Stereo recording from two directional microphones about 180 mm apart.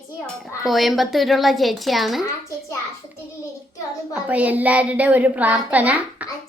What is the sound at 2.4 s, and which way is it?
A child's voice, 15° left (ahead or behind).